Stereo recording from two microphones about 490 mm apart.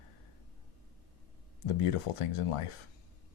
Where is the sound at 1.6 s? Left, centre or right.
Left.